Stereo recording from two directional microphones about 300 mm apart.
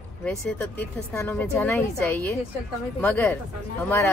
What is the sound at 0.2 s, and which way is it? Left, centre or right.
Speech, centre.